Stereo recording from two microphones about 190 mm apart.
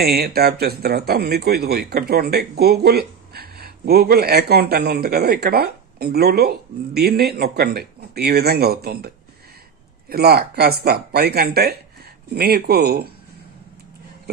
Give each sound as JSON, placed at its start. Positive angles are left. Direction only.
{"t": 0.0, "sound": "speech", "side_deg": -55}